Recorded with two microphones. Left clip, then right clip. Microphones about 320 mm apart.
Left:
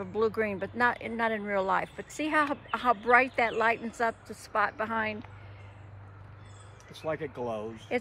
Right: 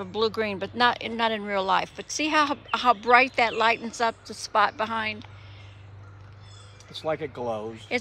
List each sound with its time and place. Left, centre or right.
0.0 s speech: centre
7.0 s speech: right
7.9 s speech: centre